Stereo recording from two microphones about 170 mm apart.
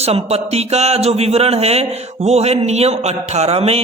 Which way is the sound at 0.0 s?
35° right (ahead or behind).